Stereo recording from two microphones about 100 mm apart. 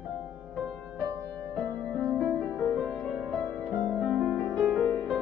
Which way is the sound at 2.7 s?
15° left (ahead or behind).